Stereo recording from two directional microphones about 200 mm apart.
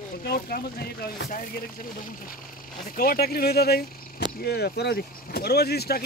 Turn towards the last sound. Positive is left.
turn(degrees=50)  # may be behind; listen again after turning